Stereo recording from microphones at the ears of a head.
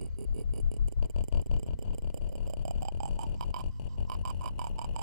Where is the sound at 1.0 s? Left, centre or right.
Left.